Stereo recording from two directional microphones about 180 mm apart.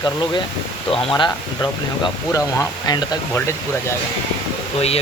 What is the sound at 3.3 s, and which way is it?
Speech, 15° left (ahead or behind).